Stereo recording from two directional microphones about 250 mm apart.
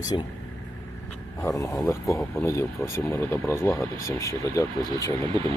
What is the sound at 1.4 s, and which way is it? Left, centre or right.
Speech, centre.